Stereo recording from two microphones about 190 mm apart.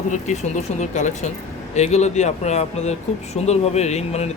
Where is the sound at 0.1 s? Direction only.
40° left (ahead or behind).